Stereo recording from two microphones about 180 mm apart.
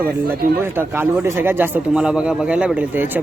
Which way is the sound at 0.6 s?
10° right (ahead or behind).